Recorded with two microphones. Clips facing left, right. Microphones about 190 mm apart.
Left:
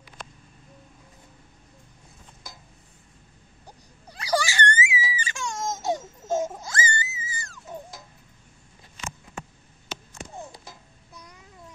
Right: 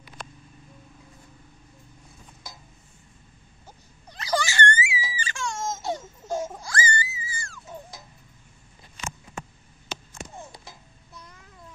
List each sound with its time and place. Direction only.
3.6 s wail: 15° left (ahead or behind)
5.9 s baby laughter: 20° left (ahead or behind)
6.6 s music: 20° left (ahead or behind)
11.1 s babbling: 15° left (ahead or behind)